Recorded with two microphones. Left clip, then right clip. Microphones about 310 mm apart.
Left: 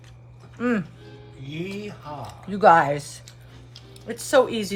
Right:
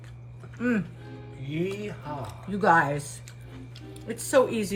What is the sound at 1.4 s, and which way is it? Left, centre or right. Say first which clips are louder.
Speech: right 2 dB; centre.